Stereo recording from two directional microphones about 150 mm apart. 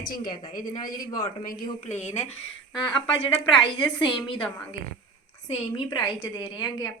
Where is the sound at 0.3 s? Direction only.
25° left (ahead or behind).